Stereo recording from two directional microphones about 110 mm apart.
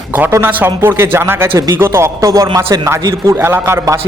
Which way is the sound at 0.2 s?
20° right (ahead or behind).